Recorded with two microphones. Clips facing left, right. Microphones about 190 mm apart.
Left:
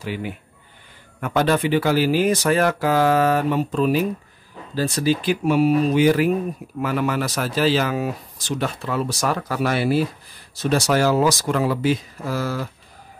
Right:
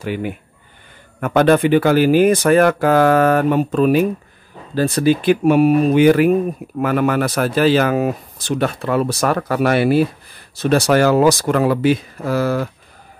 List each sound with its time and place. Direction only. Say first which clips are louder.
0.0 s speech: right 5 dB; 55° right (ahead or behind)